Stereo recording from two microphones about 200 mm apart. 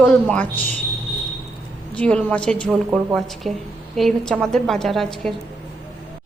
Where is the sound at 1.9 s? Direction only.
5° left (ahead or behind).